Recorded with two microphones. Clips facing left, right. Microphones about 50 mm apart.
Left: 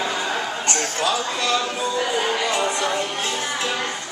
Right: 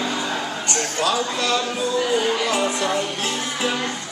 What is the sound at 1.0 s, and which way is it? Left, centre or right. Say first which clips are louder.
Speech: right 2 dB; centre.